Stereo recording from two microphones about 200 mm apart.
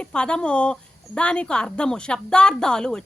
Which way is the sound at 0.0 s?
5° left (ahead or behind).